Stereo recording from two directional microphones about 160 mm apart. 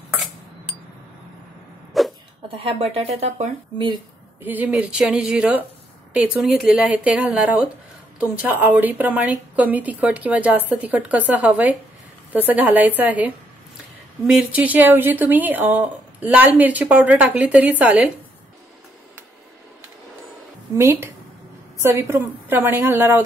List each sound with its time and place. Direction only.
2.0 s a sound: centre (ahead or behind)
2.5 s speech: 35° right (ahead or behind)
4.4 s speech: 10° right (ahead or behind)
20.7 s speech: 15° right (ahead or behind)